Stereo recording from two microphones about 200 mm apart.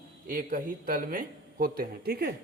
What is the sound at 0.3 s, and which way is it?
A man's voice, 45° right (ahead or behind).